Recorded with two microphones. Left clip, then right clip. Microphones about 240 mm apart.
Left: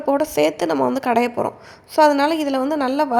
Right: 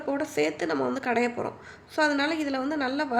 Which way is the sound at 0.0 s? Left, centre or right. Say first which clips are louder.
Left 9 dB; left.